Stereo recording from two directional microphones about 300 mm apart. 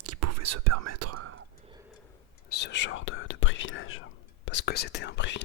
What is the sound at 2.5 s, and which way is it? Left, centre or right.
Whispering, left.